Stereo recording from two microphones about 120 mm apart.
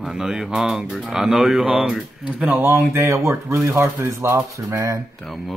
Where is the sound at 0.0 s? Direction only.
5° right (ahead or behind); by 5.0 s 25° right (ahead or behind).